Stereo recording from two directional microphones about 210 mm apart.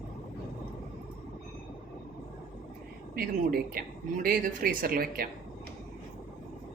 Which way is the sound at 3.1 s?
45° right (ahead or behind).